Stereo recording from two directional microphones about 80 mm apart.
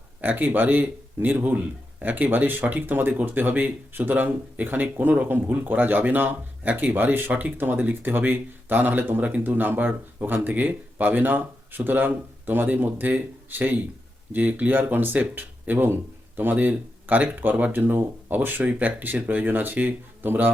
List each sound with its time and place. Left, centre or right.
0.2 s speech: right